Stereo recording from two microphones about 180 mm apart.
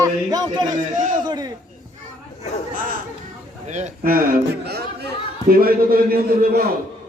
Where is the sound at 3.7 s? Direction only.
45° right (ahead or behind).